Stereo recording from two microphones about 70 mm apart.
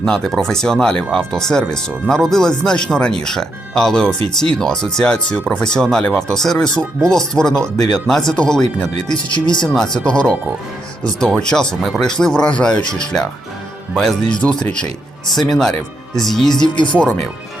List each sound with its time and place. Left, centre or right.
0.0 s speech: centre
9.0 s speech: left
9.6 s speech: centre
14.3 s speech: centre